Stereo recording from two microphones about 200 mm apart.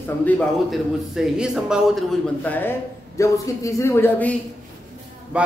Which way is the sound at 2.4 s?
10° left (ahead or behind).